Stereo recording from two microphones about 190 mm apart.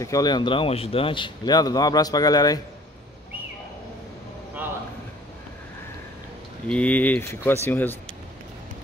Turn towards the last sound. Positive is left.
turn(degrees=10)  # may be behind; listen again after turning